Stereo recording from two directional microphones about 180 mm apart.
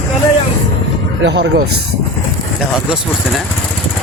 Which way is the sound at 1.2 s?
75° right (ahead or behind).